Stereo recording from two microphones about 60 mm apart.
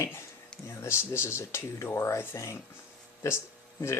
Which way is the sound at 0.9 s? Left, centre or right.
Left.